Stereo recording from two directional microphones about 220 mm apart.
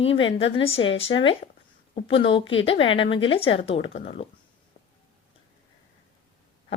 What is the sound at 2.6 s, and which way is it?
Speech, 25° left (ahead or behind).